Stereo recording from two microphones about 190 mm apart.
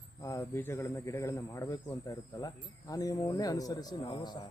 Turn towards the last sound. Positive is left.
turn(degrees=25)  # may be behind; listen again after turning